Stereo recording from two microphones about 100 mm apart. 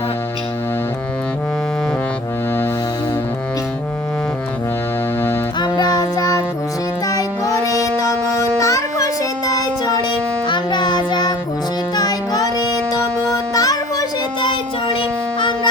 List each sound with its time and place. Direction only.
5.5 s music: 45° left (ahead or behind)
10.5 s child singing: 50° left (ahead or behind)
11.9 s music: 40° left (ahead or behind)
14.4 s child singing: 55° left (ahead or behind)